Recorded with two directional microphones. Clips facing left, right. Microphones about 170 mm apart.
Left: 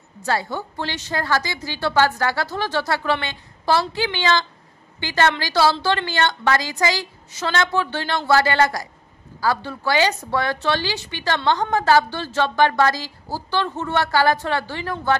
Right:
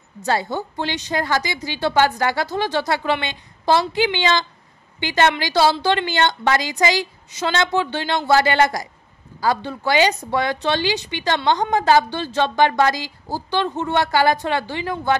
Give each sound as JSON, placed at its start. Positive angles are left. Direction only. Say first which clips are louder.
{"t": 0.2, "sound": "a woman's voice", "louder": "right 2 dB", "side_deg": -20}